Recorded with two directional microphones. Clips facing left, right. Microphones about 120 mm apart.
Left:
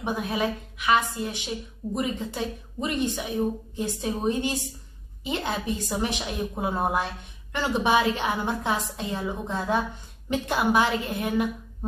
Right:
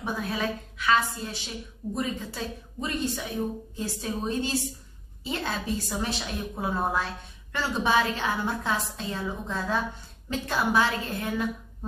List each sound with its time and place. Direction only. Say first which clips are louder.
0.0 s a woman's voice: left 3 dB; 15° left (ahead or behind)